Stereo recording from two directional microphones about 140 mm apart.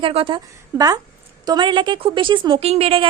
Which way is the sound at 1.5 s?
35° right (ahead or behind).